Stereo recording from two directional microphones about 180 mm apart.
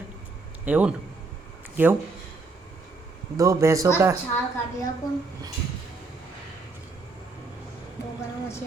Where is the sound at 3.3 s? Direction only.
20° right (ahead or behind).